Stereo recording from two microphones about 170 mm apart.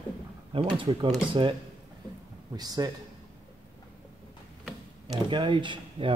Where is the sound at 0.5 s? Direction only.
30° right (ahead or behind).